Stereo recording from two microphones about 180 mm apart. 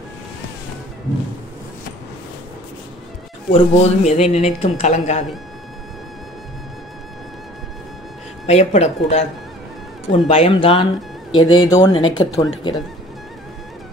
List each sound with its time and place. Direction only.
3.5 s a woman's voice: 35° left (ahead or behind)
8.5 s a woman's voice: 35° left (ahead or behind)